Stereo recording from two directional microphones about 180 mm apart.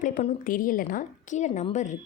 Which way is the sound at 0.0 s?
45° left (ahead or behind).